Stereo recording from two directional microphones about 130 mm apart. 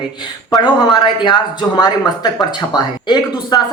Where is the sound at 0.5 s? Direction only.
30° left (ahead or behind).